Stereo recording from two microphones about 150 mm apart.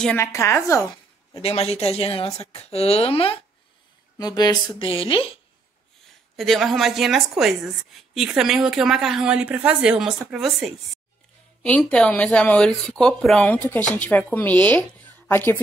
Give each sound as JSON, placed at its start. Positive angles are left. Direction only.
{"t": 0.2, "sound": "a woman's voice", "side_deg": 20}
{"t": 1.3, "sound": "a woman's voice", "side_deg": 45}
{"t": 4.2, "sound": "speech", "side_deg": 25}
{"t": 6.3, "sound": "speech", "side_deg": 0}
{"t": 11.6, "sound": "speech", "side_deg": 10}